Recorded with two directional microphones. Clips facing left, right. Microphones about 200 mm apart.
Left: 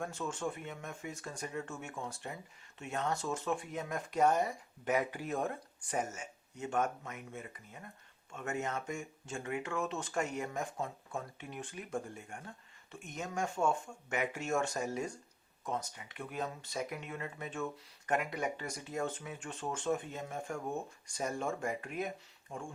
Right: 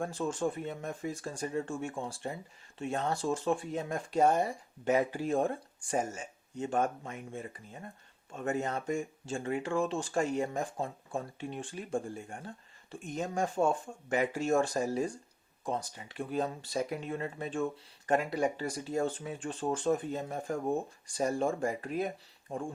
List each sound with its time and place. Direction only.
0.0 s speech: 35° right (ahead or behind)